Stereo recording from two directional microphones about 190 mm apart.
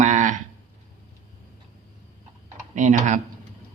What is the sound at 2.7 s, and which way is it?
Speech, 40° right (ahead or behind).